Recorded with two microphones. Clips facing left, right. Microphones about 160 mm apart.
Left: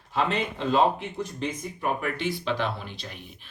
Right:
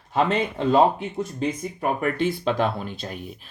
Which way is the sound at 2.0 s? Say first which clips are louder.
Right 6 dB; 50° right (ahead or behind).